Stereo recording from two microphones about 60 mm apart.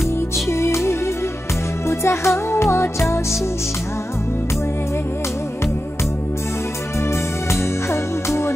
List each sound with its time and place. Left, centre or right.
0.5 s music: left
7.1 s music: left